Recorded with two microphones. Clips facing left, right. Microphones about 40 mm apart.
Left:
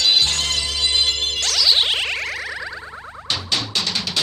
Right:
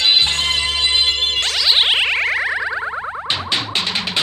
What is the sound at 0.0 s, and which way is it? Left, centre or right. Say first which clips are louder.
Music: right 3 dB; right.